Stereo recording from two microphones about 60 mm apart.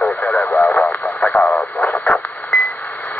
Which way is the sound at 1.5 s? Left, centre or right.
Left.